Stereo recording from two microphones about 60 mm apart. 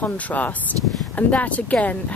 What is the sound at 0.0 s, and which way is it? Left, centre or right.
Speech, left.